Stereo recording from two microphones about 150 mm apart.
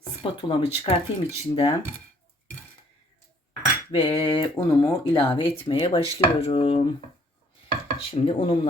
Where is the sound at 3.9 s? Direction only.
40° left (ahead or behind).